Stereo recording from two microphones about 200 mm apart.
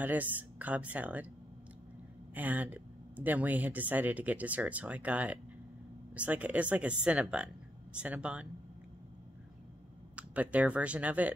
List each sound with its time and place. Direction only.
0.0 s speech: 10° right (ahead or behind)
2.3 s speech: 10° right (ahead or behind)
10.1 s speech: 5° right (ahead or behind)